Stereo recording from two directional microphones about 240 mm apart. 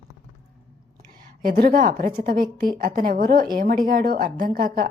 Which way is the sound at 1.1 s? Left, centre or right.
Right.